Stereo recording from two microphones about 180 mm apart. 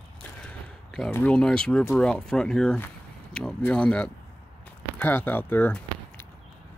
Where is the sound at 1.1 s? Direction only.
10° left (ahead or behind).